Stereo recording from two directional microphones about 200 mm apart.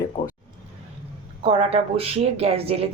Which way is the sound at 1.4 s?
30° right (ahead or behind).